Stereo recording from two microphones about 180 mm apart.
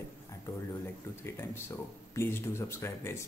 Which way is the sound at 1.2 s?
15° left (ahead or behind).